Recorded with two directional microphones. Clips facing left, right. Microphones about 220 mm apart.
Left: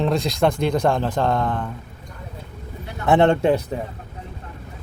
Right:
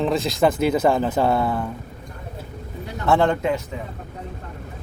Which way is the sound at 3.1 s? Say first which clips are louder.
Left 3 dB; 25° left (ahead or behind).